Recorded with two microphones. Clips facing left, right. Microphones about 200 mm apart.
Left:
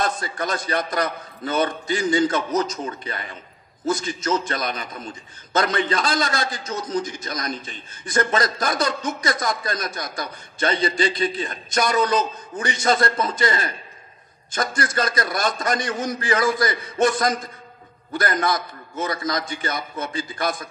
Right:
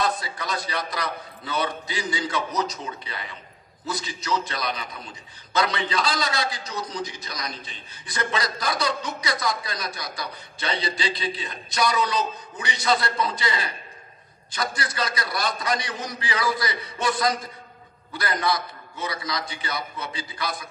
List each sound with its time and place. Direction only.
0.0 s a man's voice: 45° left (ahead or behind)